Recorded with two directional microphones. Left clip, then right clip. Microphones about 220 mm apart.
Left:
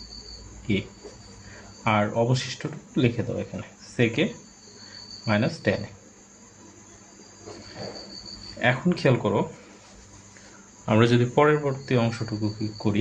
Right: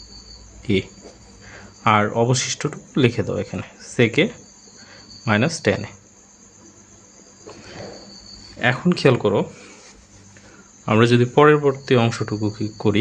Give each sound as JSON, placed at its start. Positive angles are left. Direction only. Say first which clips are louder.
{"t": 1.8, "sound": "speech", "louder": "right 6 dB", "side_deg": -35}
{"t": 8.5, "sound": "speech", "louder": "right 4 dB", "side_deg": -30}
{"t": 10.8, "sound": "speech", "louder": "right 5 dB", "side_deg": -30}